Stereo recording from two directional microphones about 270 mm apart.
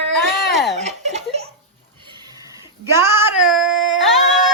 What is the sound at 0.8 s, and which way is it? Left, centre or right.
Giggle, right.